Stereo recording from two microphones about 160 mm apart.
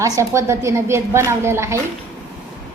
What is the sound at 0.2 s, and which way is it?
A woman's voice, 15° right (ahead or behind).